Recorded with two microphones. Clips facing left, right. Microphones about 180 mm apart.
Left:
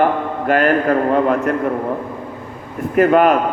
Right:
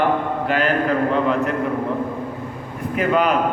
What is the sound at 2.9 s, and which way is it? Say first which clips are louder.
Speech: left 7 dB; 50° left (ahead or behind).